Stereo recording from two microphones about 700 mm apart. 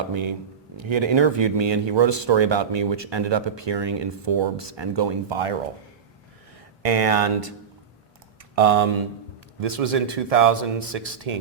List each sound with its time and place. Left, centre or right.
0.1 s speech: right
6.8 s speech: right
8.5 s speech: right